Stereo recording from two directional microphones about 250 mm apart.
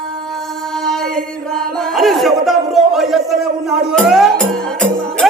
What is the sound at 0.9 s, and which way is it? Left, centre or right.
Chant, centre.